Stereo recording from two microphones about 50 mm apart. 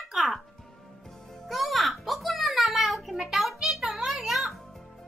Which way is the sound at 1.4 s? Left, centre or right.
Centre.